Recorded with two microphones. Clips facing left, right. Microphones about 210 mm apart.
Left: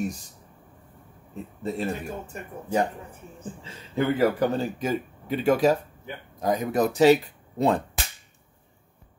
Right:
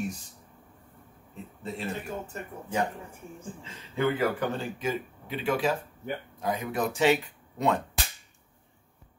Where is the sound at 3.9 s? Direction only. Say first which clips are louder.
Left 4 dB; 35° left (ahead or behind).